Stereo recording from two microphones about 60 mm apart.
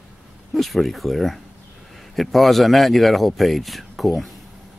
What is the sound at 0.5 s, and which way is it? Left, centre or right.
Speech, centre.